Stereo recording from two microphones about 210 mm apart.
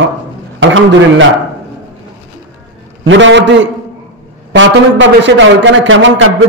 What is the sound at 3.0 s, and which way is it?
A man's voice, 60° right (ahead or behind).